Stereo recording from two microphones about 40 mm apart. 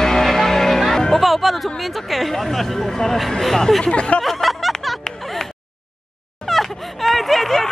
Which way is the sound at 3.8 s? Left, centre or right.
Left.